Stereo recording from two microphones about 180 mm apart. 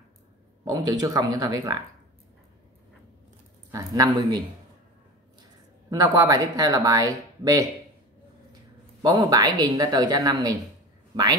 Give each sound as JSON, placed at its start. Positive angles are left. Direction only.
{"t": 0.7, "sound": "speech", "side_deg": -20}
{"t": 3.7, "sound": "speech", "side_deg": -20}
{"t": 5.9, "sound": "speech", "side_deg": -20}
{"t": 9.0, "sound": "speech", "side_deg": -20}